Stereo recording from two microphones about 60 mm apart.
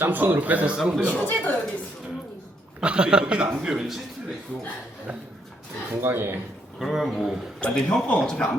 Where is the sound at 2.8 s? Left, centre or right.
Centre.